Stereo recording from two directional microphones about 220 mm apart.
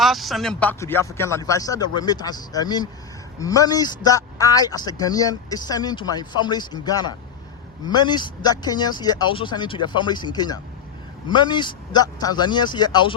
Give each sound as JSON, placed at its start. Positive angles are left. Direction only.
{"t": 0.0, "sound": "speech", "side_deg": 0}